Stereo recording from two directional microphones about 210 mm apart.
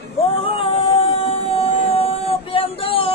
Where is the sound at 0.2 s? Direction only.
25° left (ahead or behind).